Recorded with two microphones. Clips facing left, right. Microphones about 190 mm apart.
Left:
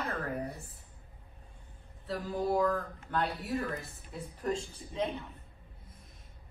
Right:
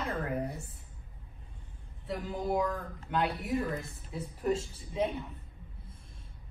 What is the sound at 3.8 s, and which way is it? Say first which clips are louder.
A woman's voice: right 3 dB; centre (ahead or behind).